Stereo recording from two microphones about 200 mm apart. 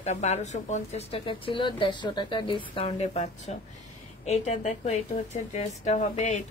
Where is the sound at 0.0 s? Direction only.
35° left (ahead or behind).